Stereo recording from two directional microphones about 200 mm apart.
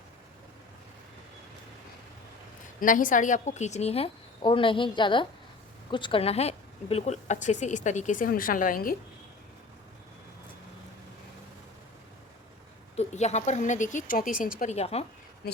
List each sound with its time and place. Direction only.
2.8 s a woman's voice: 40° left (ahead or behind)
13.0 s a woman's voice: 35° left (ahead or behind)
14.6 s a woman's voice: 30° left (ahead or behind)